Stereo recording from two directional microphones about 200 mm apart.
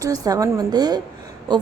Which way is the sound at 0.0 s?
15° right (ahead or behind).